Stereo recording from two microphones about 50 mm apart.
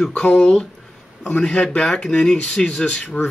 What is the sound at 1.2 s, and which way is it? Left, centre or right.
Speech, left.